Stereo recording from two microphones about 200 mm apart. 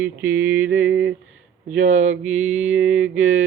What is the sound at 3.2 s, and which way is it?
Speech, 40° right (ahead or behind).